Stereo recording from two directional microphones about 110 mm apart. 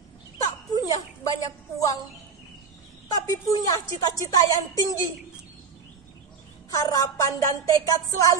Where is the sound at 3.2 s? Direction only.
30° left (ahead or behind).